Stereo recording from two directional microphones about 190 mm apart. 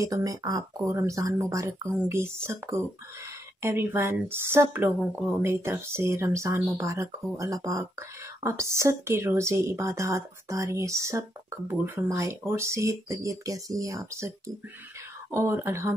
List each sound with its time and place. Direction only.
0.0 s speech: 20° right (ahead or behind)
15.3 s speech: 15° right (ahead or behind)